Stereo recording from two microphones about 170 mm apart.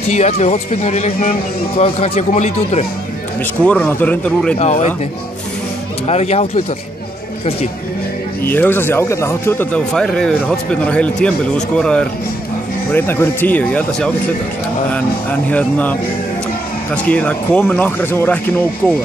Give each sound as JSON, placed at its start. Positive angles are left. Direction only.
{"t": 0.1, "sound": "speech", "side_deg": 40}
{"t": 3.6, "sound": "speech", "side_deg": 10}
{"t": 4.6, "sound": "speech", "side_deg": 40}
{"t": 6.0, "sound": "speech", "side_deg": 40}
{"t": 8.5, "sound": "speech", "side_deg": 10}
{"t": 15.5, "sound": "speech", "side_deg": 10}